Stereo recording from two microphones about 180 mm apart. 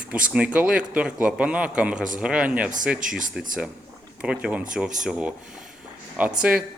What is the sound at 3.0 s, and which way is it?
Speech, 45° right (ahead or behind).